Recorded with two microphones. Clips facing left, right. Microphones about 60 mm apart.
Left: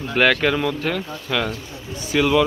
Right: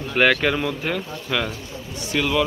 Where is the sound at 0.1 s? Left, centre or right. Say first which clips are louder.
Left 1 dB; centre.